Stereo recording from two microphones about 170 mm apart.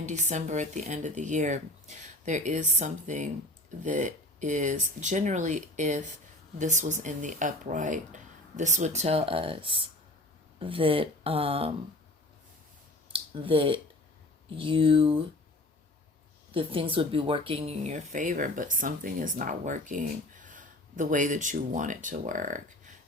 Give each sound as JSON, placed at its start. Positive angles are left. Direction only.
{"t": 0.0, "sound": "speech", "side_deg": -45}
{"t": 13.1, "sound": "speech", "side_deg": -30}
{"t": 16.6, "sound": "speech", "side_deg": -30}